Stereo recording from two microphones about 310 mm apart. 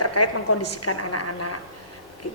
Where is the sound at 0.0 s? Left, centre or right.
Left.